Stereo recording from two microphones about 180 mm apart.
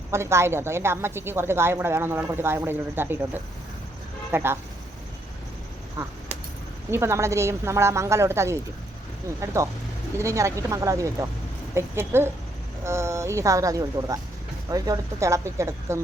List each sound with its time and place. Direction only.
0.1 s a woman's voice: 15° right (ahead or behind)
4.3 s speech: 10° right (ahead or behind)
6.9 s a woman's voice: 15° right (ahead or behind)